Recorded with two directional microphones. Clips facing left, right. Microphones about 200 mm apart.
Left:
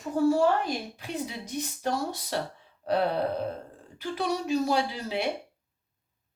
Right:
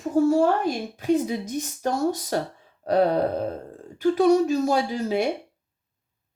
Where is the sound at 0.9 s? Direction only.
45° right (ahead or behind).